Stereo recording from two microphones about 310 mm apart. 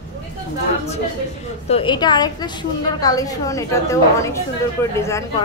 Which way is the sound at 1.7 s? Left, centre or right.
Centre.